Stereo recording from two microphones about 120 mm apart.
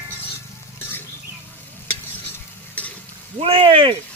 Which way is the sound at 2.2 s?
15° left (ahead or behind).